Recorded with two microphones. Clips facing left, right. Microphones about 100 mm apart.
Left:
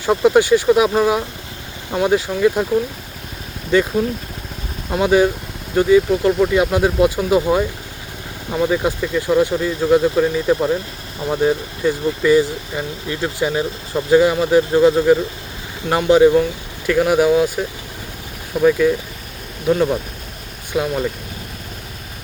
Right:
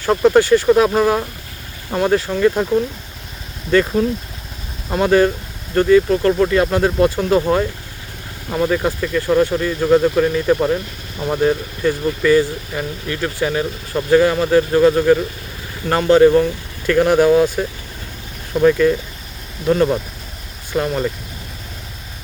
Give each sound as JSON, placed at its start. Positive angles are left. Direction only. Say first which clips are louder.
{"t": 0.0, "sound": "speech", "louder": "right 1 dB", "side_deg": 10}
{"t": 0.7, "sound": "speech", "louder": "right 1 dB", "side_deg": 0}